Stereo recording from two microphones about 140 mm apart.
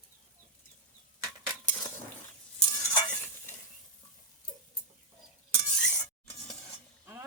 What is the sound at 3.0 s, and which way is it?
Stir, 15° left (ahead or behind).